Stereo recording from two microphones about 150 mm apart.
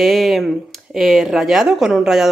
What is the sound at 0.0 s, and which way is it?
A woman's voice, centre (ahead or behind).